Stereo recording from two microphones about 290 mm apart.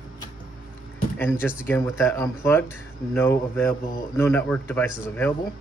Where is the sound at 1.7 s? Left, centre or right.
Centre.